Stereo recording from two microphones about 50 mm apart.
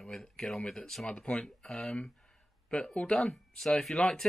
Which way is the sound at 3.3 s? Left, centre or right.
Centre.